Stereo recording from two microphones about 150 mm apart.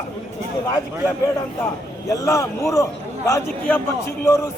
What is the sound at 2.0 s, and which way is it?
A man's voice, 20° left (ahead or behind).